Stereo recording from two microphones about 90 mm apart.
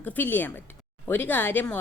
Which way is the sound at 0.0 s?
20° left (ahead or behind).